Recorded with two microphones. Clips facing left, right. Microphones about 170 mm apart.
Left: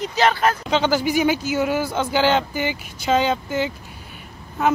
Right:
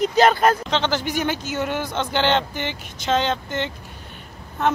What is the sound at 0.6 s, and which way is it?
Speech, 10° left (ahead or behind).